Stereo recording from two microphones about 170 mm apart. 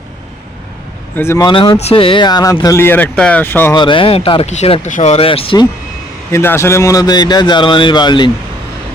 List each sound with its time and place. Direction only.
1.1 s speech: 15° left (ahead or behind)
1.5 s speech: 25° left (ahead or behind)
3.8 s speech: 30° left (ahead or behind)
6.3 s speech: 15° left (ahead or behind)